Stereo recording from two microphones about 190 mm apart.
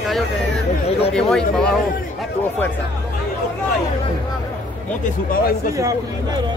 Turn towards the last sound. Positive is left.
turn(degrees=50)  # may be behind; listen again after turning